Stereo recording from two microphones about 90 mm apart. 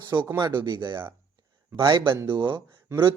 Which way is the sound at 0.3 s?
45° right (ahead or behind).